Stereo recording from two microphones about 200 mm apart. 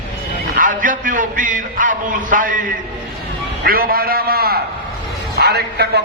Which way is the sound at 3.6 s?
45° right (ahead or behind).